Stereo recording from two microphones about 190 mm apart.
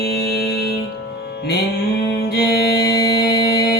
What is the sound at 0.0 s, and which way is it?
Music, 55° left (ahead or behind).